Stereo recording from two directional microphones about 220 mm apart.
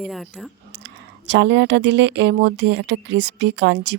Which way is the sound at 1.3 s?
55° right (ahead or behind).